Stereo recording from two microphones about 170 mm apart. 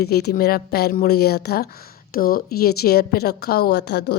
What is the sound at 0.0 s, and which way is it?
A woman's voice, 70° left (ahead or behind).